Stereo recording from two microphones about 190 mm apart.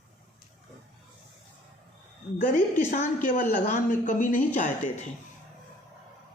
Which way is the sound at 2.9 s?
40° left (ahead or behind).